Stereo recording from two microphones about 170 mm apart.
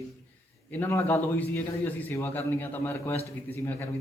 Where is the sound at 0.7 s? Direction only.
15° left (ahead or behind).